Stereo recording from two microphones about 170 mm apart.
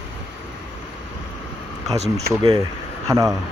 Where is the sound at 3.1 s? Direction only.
20° right (ahead or behind).